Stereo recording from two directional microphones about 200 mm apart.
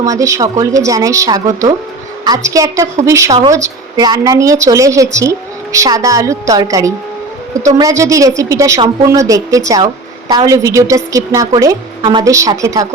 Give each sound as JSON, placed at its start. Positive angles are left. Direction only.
{"t": 0.0, "sound": "speech", "side_deg": -15}